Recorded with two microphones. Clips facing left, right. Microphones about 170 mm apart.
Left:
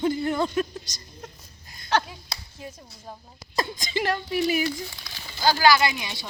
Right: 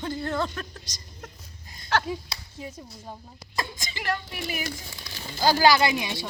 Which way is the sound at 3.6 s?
25° left (ahead or behind).